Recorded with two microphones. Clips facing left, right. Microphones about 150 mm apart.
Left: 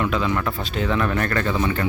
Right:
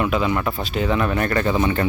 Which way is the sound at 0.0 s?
10° right (ahead or behind).